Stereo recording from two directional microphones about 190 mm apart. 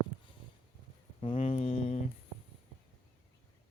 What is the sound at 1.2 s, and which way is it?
Speech, 30° left (ahead or behind).